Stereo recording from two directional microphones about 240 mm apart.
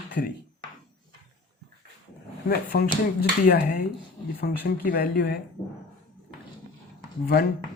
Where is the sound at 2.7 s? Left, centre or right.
Left.